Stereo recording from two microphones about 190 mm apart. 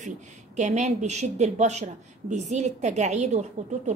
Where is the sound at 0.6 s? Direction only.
35° right (ahead or behind).